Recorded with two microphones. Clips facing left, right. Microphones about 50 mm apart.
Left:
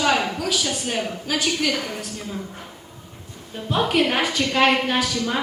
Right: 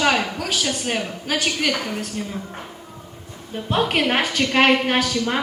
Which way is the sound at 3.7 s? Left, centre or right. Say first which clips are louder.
Even; right.